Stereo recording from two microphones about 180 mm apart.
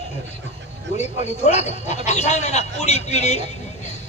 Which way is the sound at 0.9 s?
40° left (ahead or behind).